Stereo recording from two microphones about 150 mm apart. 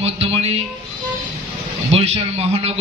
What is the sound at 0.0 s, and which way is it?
Speech, 40° right (ahead or behind).